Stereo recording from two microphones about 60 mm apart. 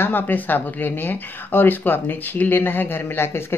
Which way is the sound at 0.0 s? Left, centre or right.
Left.